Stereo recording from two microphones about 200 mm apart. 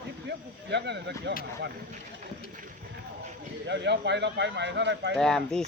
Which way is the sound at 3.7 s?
60° right (ahead or behind).